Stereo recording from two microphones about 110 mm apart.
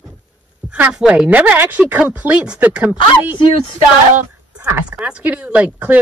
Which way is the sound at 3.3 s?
50° left (ahead or behind).